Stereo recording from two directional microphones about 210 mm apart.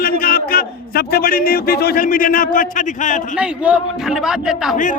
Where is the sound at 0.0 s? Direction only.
45° left (ahead or behind).